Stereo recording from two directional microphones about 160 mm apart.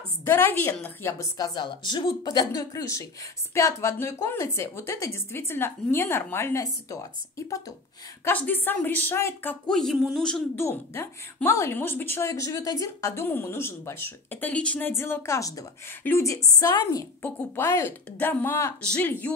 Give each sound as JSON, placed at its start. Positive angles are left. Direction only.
{"t": 0.2, "sound": "a woman's voice", "side_deg": 15}